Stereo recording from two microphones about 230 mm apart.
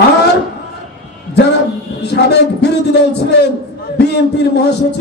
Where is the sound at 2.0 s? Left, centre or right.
Left.